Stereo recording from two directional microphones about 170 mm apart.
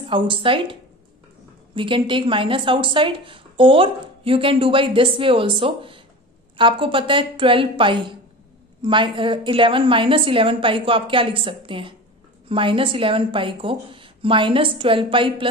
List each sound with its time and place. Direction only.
0.0 s a woman's voice: 30° right (ahead or behind)
1.8 s a woman's voice: 30° right (ahead or behind)